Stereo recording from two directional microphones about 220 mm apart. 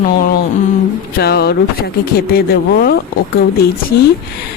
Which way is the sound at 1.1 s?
45° left (ahead or behind).